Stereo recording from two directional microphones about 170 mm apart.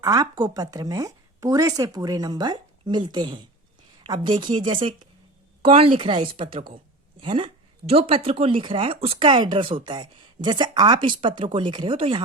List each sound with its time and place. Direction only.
0.0 s speech: 20° right (ahead or behind)